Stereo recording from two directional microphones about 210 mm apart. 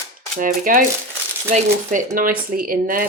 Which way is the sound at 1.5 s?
35° right (ahead or behind).